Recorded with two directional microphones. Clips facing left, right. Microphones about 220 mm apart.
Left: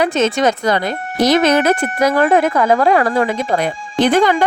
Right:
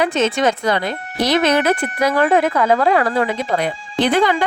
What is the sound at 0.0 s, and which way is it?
Speech, 40° left (ahead or behind).